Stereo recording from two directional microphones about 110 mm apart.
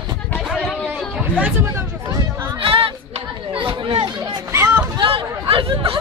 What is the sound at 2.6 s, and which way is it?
Chatter, 55° right (ahead or behind).